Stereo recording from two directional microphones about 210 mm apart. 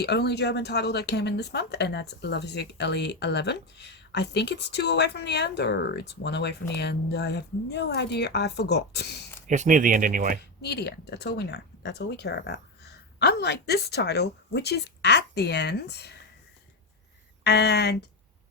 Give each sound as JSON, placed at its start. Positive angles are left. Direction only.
{"t": 0.0, "sound": "speech", "side_deg": 50}
{"t": 9.5, "sound": "speech", "side_deg": -35}
{"t": 10.6, "sound": "speech", "side_deg": 50}
{"t": 17.4, "sound": "speech", "side_deg": 50}